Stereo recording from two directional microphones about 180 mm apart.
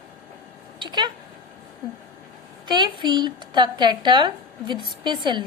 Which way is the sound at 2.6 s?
25° right (ahead or behind).